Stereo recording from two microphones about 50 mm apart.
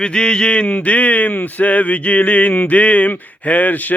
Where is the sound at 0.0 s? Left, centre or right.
Centre.